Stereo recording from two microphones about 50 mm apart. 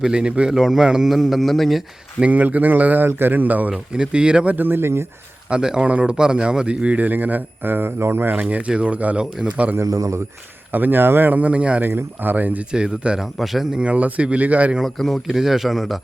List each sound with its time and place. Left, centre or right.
0.1 s speech: centre
0.5 s a man's voice: centre
2.2 s a man's voice: right
3.7 s speech: centre
4.5 s speech: right
5.5 s a man's voice: centre; by 8.4 s right
8.4 s speech: right
10.7 s a man's voice: right
11.8 s a man's voice: right
12.7 s speech: centre
13.1 s a man's voice: centre
13.7 s speech: right
14.8 s a man's voice: centre